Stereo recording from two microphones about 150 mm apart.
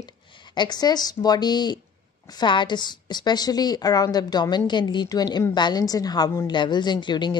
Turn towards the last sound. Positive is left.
turn(degrees=30)  # may be behind; listen again after turning